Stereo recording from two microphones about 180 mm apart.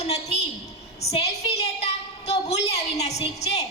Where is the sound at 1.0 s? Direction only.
35° left (ahead or behind).